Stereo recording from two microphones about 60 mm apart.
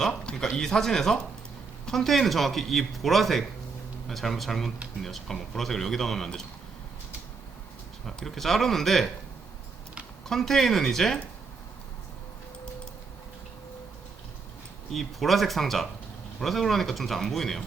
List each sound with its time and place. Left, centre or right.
0.1 s a sound: centre
0.5 s speech: centre
8.0 s speech: centre
10.2 s speech: centre
14.9 s speech: centre